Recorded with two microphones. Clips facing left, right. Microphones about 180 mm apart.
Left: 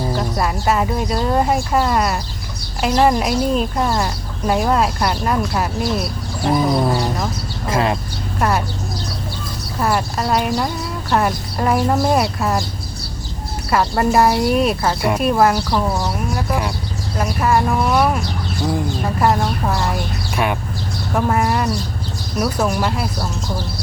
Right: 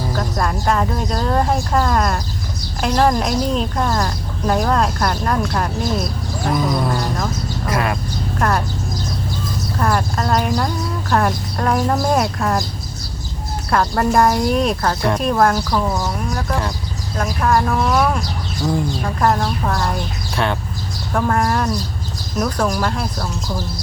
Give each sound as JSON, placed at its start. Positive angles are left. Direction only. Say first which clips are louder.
{"t": 0.3, "sound": "speech", "louder": "even", "side_deg": 5}
{"t": 6.5, "sound": "a sound", "louder": "left 3 dB", "side_deg": 25}
{"t": 8.4, "sound": "speech", "louder": "left 1 dB", "side_deg": 5}
{"t": 9.7, "sound": "speech", "louder": "left 1 dB", "side_deg": 5}
{"t": 13.7, "sound": "speech", "louder": "left 1 dB", "side_deg": 5}
{"t": 19.2, "sound": "speech", "louder": "even", "side_deg": 10}